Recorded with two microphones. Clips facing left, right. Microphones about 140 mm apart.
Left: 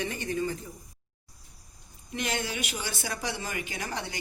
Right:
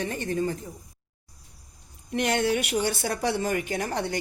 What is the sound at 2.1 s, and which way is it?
A man's voice, 60° right (ahead or behind).